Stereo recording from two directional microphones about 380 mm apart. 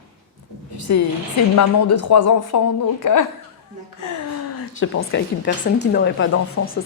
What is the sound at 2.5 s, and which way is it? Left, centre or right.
A woman's voice, left.